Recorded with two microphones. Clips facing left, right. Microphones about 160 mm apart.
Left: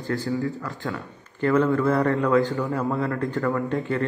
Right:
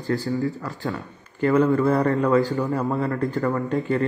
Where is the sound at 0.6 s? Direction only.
20° right (ahead or behind).